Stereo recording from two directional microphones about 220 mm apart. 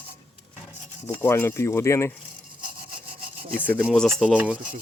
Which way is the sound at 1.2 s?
10° left (ahead or behind).